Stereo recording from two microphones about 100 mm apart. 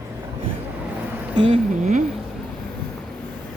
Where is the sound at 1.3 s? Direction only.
65° right (ahead or behind).